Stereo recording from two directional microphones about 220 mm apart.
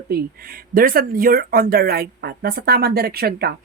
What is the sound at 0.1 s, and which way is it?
Speech, 40° right (ahead or behind).